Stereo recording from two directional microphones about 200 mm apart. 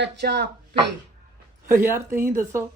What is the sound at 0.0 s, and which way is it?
Speech, 55° right (ahead or behind).